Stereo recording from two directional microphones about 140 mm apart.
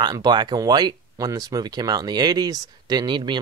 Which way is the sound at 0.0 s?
30° right (ahead or behind).